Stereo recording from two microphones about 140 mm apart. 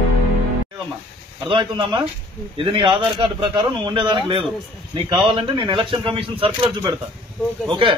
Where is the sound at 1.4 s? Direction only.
35° right (ahead or behind).